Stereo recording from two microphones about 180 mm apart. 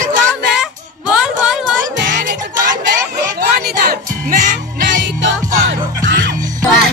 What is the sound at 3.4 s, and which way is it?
Music, 55° right (ahead or behind).